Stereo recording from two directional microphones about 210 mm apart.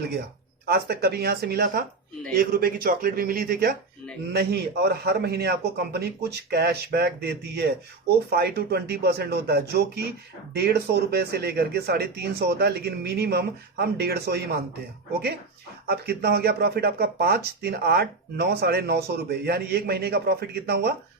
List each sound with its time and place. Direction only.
0.6 s speech: 45° right (ahead or behind)
15.9 s speech: 50° right (ahead or behind)